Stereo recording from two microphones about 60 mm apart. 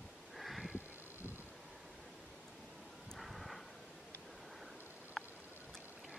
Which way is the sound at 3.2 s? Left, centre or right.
Centre.